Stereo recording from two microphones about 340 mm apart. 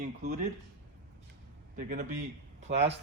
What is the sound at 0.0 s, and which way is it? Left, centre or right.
Speech, right.